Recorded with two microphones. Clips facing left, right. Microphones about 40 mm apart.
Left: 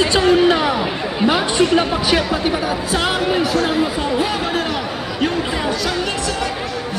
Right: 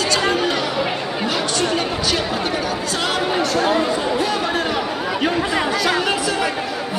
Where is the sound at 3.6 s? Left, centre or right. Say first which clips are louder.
Even; centre.